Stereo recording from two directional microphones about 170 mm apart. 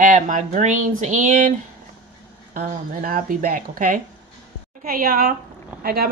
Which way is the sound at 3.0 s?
55° right (ahead or behind).